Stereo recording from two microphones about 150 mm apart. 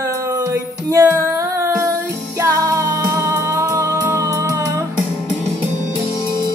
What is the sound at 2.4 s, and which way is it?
Music, 20° right (ahead or behind).